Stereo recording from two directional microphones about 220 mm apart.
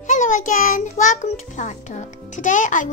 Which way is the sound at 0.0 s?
35° left (ahead or behind).